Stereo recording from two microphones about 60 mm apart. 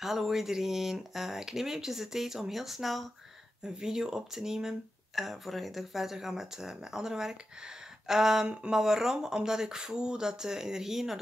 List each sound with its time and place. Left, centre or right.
0.0 s speech: centre